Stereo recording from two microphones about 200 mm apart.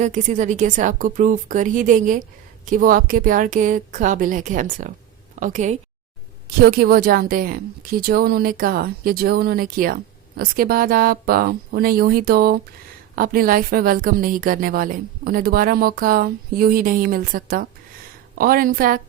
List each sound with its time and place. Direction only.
0.0 s a woman's voice: 35° right (ahead or behind)
6.6 s a woman's voice: 50° right (ahead or behind)